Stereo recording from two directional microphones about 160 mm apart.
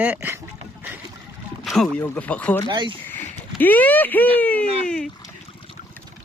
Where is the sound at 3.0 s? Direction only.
10° left (ahead or behind).